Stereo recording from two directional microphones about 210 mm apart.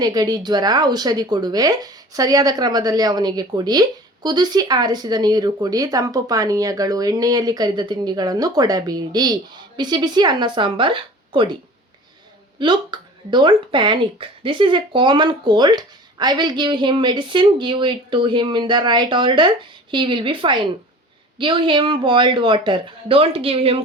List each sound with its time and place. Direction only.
0.0 s speech: 20° right (ahead or behind)
12.5 s speech: 20° right (ahead or behind)